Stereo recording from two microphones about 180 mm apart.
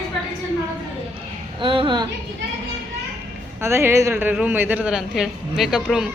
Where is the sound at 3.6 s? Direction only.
15° right (ahead or behind).